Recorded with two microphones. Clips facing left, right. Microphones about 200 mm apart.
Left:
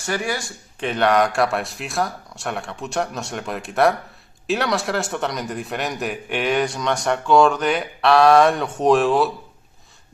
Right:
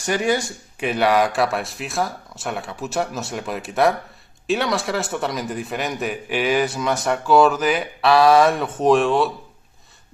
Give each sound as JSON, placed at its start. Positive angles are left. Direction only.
{"t": 0.0, "sound": "speech", "side_deg": -20}
{"t": 0.7, "sound": "a man's voice", "side_deg": -5}